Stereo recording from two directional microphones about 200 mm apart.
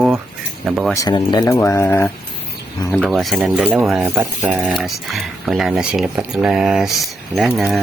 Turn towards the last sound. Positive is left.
turn(degrees=0)  # may be behind; listen again after turning